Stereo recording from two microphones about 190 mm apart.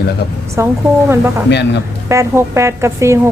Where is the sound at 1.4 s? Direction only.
65° left (ahead or behind).